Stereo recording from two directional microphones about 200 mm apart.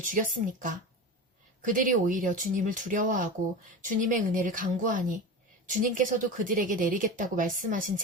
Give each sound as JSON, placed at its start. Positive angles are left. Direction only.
{"t": 0.0, "sound": "a woman's voice", "side_deg": -40}